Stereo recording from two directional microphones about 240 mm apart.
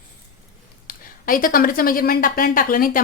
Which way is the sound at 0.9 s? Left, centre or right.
Left.